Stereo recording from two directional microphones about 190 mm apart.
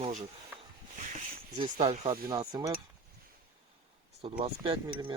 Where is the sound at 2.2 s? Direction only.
20° right (ahead or behind).